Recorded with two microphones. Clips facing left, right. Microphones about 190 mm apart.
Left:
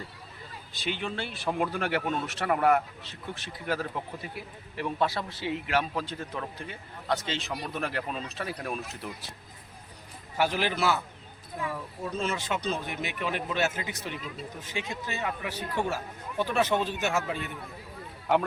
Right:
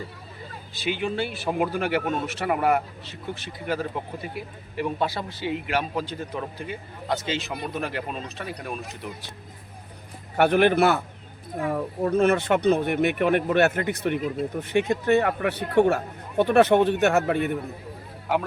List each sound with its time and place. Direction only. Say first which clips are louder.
0.7 s a man's voice: right 6 dB; 5° right (ahead or behind)
10.3 s speech: right 9 dB; 60° right (ahead or behind)